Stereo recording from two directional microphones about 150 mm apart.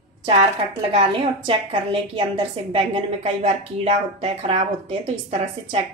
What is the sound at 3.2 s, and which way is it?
A woman's voice, 45° right (ahead or behind).